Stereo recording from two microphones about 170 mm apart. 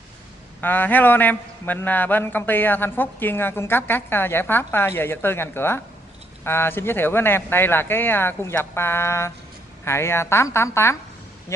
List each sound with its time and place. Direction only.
0.6 s a man's voice: 10° left (ahead or behind)